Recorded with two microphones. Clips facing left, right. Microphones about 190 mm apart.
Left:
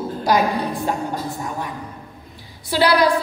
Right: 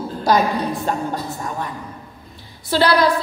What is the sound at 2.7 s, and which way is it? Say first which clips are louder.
Speech: even; 15° left (ahead or behind).